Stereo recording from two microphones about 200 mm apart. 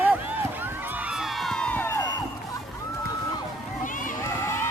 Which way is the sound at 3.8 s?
40° left (ahead or behind).